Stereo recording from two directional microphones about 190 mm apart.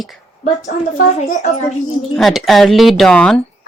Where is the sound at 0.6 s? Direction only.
40° left (ahead or behind).